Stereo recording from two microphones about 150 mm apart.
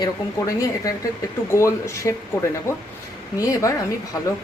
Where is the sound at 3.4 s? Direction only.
20° left (ahead or behind).